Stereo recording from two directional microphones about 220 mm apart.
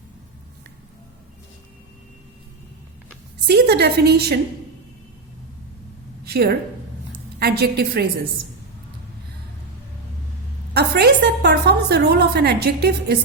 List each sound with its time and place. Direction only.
3.4 s a woman's voice: 45° right (ahead or behind)
6.2 s a woman's voice: 45° right (ahead or behind)
10.8 s a woman's voice: 45° right (ahead or behind)